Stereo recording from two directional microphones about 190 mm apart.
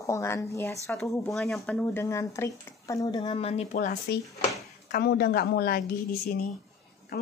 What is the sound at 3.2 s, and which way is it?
Speech, 30° left (ahead or behind).